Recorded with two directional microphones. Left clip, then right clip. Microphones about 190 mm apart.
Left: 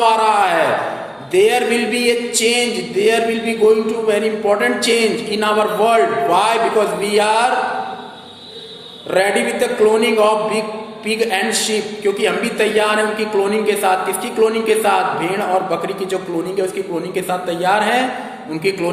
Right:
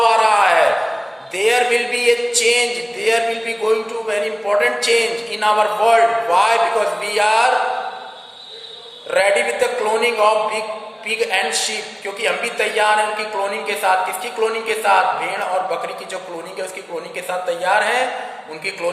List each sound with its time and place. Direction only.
0.0 s a sound: 15° left (ahead or behind)
1.3 s a man's voice: 15° left (ahead or behind)
9.0 s a man's voice: 15° left (ahead or behind)
17.2 s a man's voice: 15° left (ahead or behind)